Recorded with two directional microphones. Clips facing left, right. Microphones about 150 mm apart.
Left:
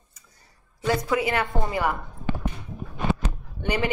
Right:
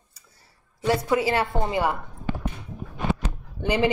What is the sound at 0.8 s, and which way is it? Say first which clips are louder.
A woman's voice: right 2 dB; 30° right (ahead or behind).